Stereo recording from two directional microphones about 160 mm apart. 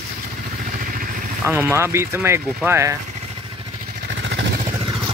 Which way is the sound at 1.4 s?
15° right (ahead or behind).